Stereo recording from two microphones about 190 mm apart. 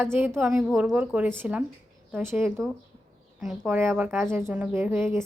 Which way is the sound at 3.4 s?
Centre (ahead or behind).